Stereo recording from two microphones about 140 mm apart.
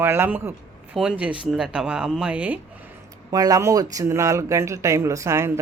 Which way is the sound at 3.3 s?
25° right (ahead or behind).